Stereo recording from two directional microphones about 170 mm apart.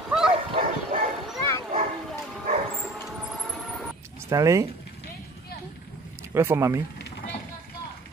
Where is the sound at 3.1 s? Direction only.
Centre (ahead or behind).